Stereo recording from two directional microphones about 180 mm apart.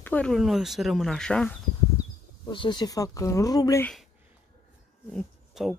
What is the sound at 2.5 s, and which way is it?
Speech, 25° left (ahead or behind).